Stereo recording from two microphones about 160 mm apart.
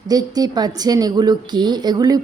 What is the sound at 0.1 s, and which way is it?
A woman's voice, 25° right (ahead or behind).